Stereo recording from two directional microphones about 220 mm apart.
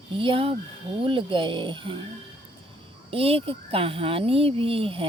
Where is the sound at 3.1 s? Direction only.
25° right (ahead or behind).